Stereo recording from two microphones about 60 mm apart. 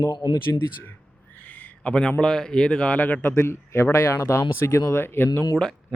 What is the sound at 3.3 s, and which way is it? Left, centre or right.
Speech, left.